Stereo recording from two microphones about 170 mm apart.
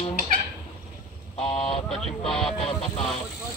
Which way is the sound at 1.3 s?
35° left (ahead or behind).